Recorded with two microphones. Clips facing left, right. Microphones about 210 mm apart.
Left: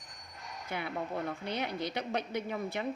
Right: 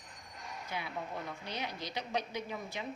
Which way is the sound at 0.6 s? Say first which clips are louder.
Left 5 dB; 55° left (ahead or behind).